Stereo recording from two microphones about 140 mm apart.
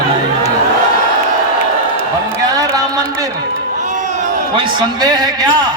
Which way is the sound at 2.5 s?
25° right (ahead or behind).